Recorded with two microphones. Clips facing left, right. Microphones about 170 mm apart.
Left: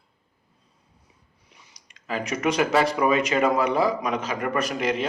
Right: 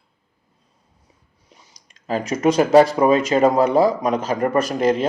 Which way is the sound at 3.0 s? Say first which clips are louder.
Right 6 dB; 35° right (ahead or behind).